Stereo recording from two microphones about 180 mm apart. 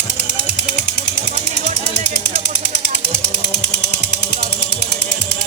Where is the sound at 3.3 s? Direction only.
70° left (ahead or behind).